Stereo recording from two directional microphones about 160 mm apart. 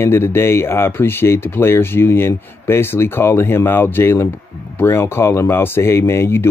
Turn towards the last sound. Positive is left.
turn(degrees=15)  # may be behind; listen again after turning